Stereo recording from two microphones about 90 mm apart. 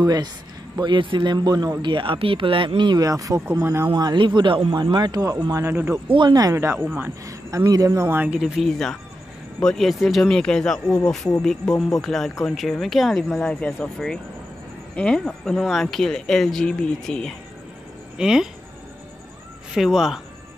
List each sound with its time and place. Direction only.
0.0 s speech: 45° right (ahead or behind)
0.7 s speech: 60° right (ahead or behind)
3.0 s a man's voice: 40° right (ahead or behind)
3.9 s speech: 55° right (ahead or behind)
4.8 s speech: 50° right (ahead or behind)
5.7 s a man's voice: 20° right (ahead or behind)
6.1 s speech: 60° right (ahead or behind)
6.5 s a man's voice: 30° right (ahead or behind)
7.2 s a man's voice: 40° right (ahead or behind)
8.3 s speech: 10° right (ahead or behind)
8.6 s speech: 5° left (ahead or behind)
18.1 s speech: 5° right (ahead or behind)
19.7 s speech: 5° right (ahead or behind)